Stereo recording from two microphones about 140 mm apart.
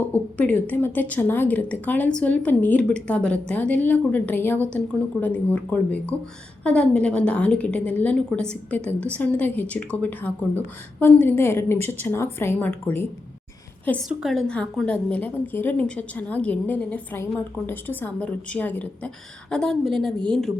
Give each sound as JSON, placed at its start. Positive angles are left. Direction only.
{"t": 0.0, "sound": "a woman's voice", "side_deg": 15}
{"t": 14.1, "sound": "a woman's voice", "side_deg": -5}